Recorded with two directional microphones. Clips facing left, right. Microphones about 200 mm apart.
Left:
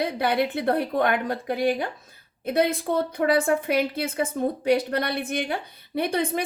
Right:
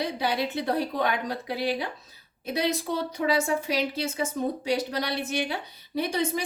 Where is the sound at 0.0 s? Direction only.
55° left (ahead or behind).